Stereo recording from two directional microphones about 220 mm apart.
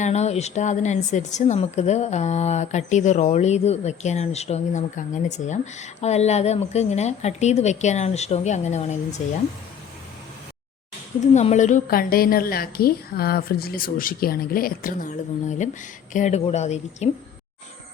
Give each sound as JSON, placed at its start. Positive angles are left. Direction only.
{"t": 0.0, "sound": "a woman's voice", "side_deg": 30}
{"t": 11.3, "sound": "a woman's voice", "side_deg": 30}